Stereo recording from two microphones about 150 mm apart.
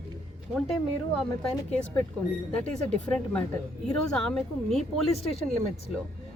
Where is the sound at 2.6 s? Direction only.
10° left (ahead or behind).